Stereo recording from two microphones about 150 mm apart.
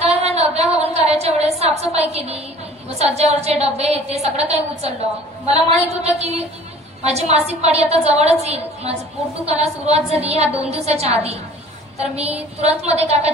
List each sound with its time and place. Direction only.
0.1 s a sound: 45° right (ahead or behind)
1.8 s a woman's voice: 45° right (ahead or behind)
6.0 s a woman's voice: 45° right (ahead or behind)